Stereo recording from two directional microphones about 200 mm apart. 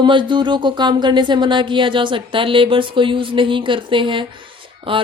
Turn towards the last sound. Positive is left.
turn(degrees=-25)  # may be behind; listen again after turning